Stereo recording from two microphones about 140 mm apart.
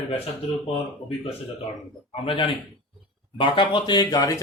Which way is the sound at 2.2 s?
40° left (ahead or behind).